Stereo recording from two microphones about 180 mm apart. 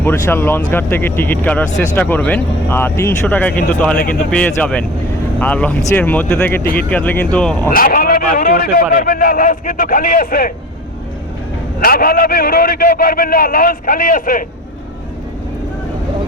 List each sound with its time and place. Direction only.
0.0 s speech: 10° left (ahead or behind)
7.7 s a man's voice: 50° left (ahead or behind)
11.8 s a man's voice: 55° left (ahead or behind)